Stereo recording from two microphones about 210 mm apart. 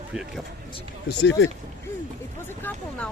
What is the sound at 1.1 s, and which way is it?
Speech, 55° left (ahead or behind).